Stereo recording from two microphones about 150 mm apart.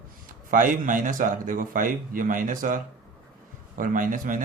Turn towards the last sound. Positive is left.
turn(degrees=-60)  # may be behind; listen again after turning